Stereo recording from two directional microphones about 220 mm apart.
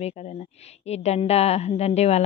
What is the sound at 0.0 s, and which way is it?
A woman's voice, 30° left (ahead or behind).